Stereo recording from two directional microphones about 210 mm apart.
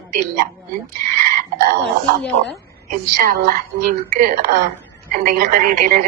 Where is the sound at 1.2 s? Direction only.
40° right (ahead or behind).